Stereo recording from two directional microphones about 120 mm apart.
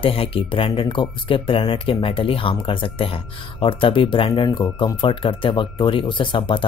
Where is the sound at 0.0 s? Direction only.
50° left (ahead or behind).